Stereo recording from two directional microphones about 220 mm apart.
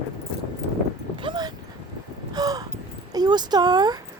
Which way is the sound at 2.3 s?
15° right (ahead or behind).